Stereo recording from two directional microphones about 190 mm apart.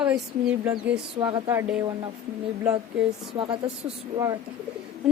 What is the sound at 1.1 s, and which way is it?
Speech, 25° right (ahead or behind).